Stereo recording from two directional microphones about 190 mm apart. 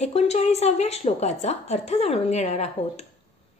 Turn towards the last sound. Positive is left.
turn(degrees=35)  # may be behind; listen again after turning